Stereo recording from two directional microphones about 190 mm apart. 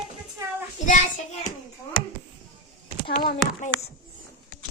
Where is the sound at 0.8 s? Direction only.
40° left (ahead or behind).